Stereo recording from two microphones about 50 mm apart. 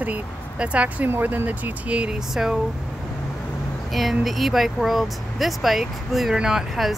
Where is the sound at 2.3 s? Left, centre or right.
Centre.